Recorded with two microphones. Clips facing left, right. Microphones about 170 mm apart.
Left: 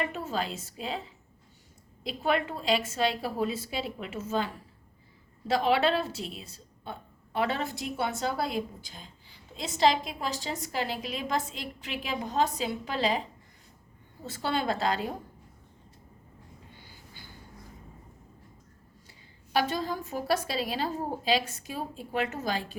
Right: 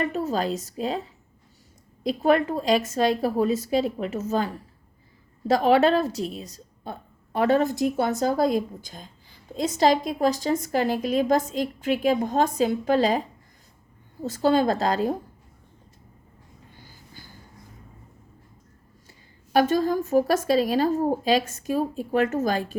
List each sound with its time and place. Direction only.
0.0 s a woman's voice: 40° right (ahead or behind)
14.3 s a woman's voice: 40° right (ahead or behind)
19.5 s a woman's voice: 45° right (ahead or behind)